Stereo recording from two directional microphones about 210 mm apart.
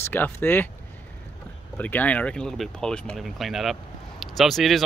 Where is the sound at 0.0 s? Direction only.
10° left (ahead or behind).